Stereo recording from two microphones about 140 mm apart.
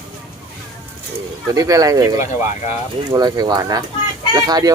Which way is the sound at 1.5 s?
25° right (ahead or behind).